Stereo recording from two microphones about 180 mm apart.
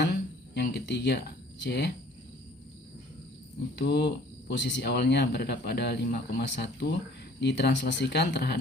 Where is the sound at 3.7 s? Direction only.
65° left (ahead or behind).